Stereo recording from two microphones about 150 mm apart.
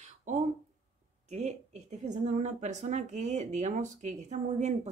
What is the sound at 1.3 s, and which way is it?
Speech, 50° right (ahead or behind).